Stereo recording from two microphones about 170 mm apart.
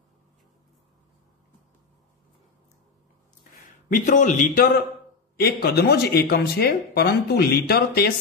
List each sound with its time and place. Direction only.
3.9 s speech: 45° left (ahead or behind)
5.4 s speech: 65° left (ahead or behind)